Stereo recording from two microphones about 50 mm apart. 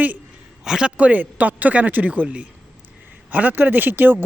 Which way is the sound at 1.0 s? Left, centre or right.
Right.